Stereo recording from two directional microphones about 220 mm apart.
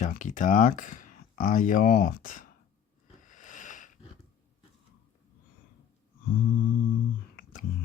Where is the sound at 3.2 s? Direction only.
35° left (ahead or behind).